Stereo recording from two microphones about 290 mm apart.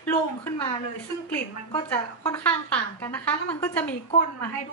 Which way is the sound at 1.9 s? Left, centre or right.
Centre.